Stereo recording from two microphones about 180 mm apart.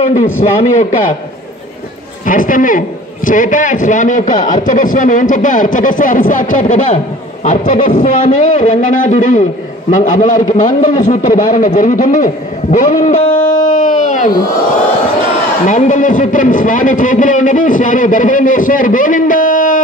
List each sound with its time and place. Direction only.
0.0 s a man's voice: 40° left (ahead or behind)
2.2 s a man's voice: 50° left (ahead or behind)
12.7 s music: 45° left (ahead or behind)
15.6 s a man's voice: 45° left (ahead or behind)